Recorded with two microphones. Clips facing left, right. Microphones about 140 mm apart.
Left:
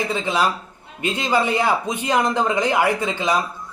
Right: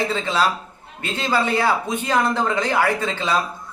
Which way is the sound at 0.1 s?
15° left (ahead or behind).